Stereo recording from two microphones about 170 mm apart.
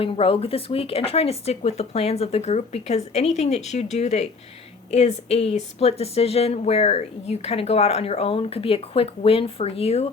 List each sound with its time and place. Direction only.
0.0 s speech: 35° left (ahead or behind)